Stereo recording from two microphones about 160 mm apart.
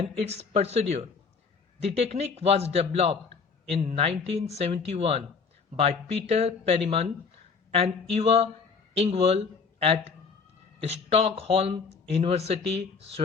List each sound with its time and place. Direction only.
0.3 s speech: 40° right (ahead or behind)